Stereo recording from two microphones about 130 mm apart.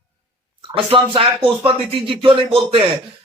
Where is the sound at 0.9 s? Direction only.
40° right (ahead or behind).